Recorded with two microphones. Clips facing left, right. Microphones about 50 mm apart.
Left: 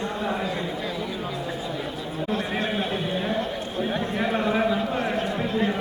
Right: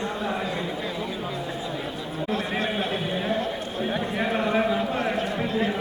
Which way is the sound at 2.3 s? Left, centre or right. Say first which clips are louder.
Even; centre.